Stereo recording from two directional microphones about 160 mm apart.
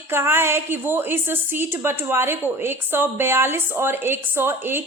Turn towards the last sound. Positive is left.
turn(degrees=-15)  # may be behind; listen again after turning